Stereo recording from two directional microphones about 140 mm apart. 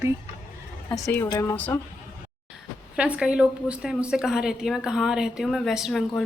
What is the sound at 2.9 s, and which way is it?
Speech, 10° right (ahead or behind).